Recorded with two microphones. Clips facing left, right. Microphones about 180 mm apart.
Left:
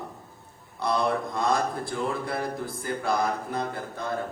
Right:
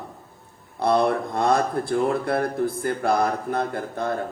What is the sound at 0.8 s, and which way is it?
Speech, 55° right (ahead or behind).